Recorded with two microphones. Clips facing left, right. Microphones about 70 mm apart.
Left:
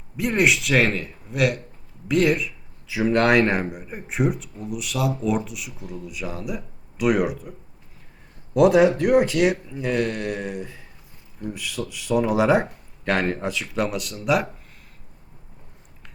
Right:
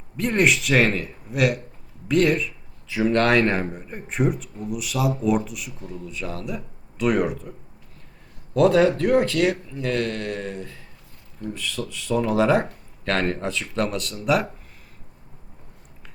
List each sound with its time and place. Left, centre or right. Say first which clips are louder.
0.2 s a man's voice: even; centre
8.5 s speech: left 1 dB; centre